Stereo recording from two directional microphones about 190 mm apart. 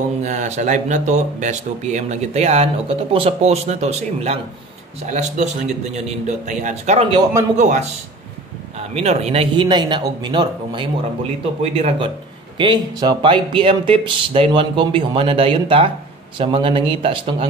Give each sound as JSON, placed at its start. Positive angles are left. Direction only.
{"t": 0.2, "sound": "speech", "side_deg": -40}
{"t": 8.9, "sound": "speech", "side_deg": -35}